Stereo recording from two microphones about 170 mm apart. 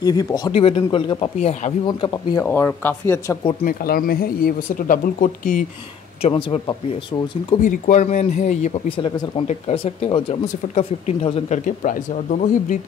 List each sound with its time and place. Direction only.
0.0 s speech: 20° left (ahead or behind)
0.5 s speech: 35° left (ahead or behind)
1.9 s speech: 25° left (ahead or behind)
2.4 s speech: 10° left (ahead or behind)
3.6 s speech: 60° left (ahead or behind)
6.2 s speech: 30° left (ahead or behind)
7.6 s speech: 45° left (ahead or behind)
8.8 s speech: 30° left (ahead or behind)
11.6 s speech: 50° left (ahead or behind)